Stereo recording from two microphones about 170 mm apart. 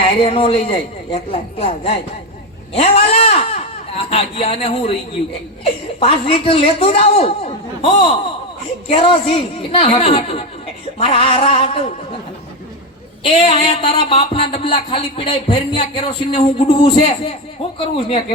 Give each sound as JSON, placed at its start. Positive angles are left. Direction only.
{"t": 0.2, "sound": "speech", "side_deg": 35}
{"t": 6.0, "sound": "speech", "side_deg": 35}
{"t": 13.2, "sound": "speech", "side_deg": 30}